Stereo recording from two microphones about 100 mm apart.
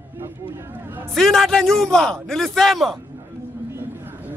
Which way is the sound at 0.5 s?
20° right (ahead or behind).